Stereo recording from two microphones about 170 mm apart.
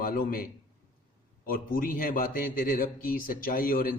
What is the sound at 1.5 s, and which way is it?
A man's voice, 55° left (ahead or behind).